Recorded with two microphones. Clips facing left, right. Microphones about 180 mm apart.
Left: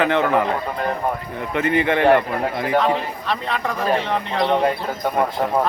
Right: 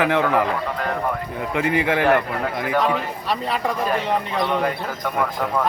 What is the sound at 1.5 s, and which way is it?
Speech, 10° right (ahead or behind).